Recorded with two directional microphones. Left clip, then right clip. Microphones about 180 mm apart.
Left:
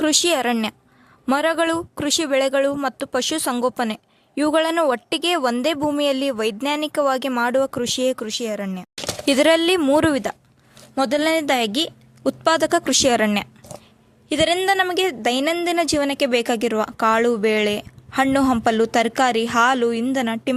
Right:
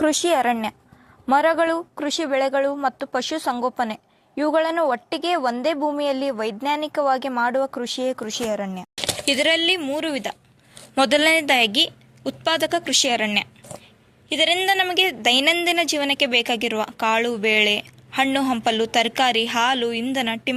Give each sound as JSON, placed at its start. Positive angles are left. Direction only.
{"t": 0.0, "sound": "speech", "side_deg": 30}
{"t": 9.2, "sound": "speech", "side_deg": 40}
{"t": 10.9, "sound": "a woman's voice", "side_deg": 15}
{"t": 11.3, "sound": "speech", "side_deg": 25}